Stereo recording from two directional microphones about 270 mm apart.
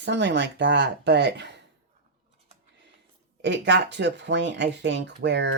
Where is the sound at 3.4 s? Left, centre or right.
Right.